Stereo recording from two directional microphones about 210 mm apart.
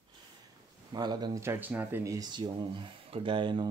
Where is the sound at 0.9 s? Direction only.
20° right (ahead or behind).